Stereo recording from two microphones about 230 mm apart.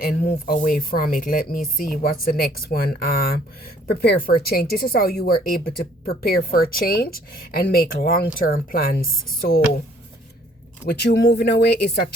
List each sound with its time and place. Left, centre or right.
0.0 s a woman's voice: left
10.8 s speech: left